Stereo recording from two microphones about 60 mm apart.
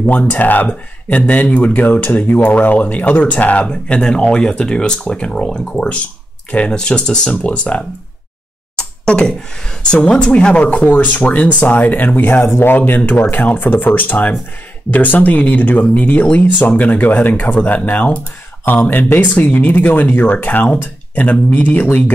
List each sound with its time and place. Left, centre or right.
0.3 s speech: left
8.7 s a sound: centre
10.0 s speech: centre